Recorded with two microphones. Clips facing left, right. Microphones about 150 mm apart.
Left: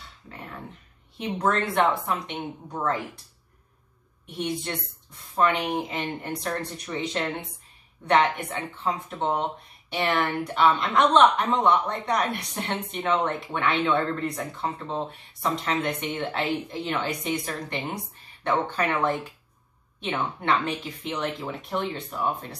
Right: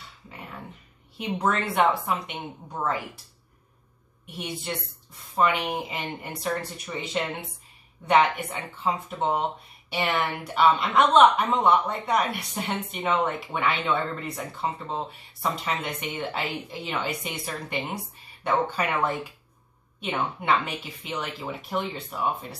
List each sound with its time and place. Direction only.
1.1 s a woman's voice: 5° right (ahead or behind)
5.3 s a woman's voice: 5° right (ahead or behind)